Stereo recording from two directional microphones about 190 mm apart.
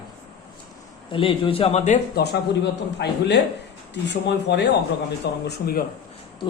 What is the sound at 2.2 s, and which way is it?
Speech, 55° left (ahead or behind).